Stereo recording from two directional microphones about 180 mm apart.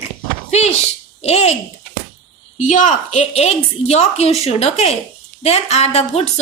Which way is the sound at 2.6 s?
45° left (ahead or behind).